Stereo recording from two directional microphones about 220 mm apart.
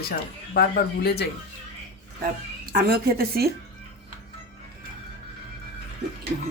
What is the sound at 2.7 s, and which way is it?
Speech, 45° right (ahead or behind).